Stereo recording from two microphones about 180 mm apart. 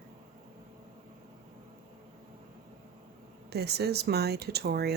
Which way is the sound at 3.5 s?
65° right (ahead or behind).